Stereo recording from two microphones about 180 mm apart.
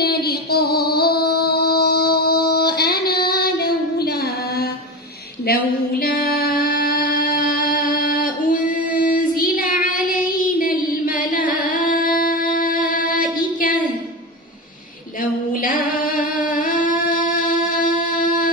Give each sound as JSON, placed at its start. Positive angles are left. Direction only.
{"t": 0.0, "sound": "music", "side_deg": 60}
{"t": 5.5, "sound": "a sound", "side_deg": 55}
{"t": 15.6, "sound": "singing", "side_deg": 50}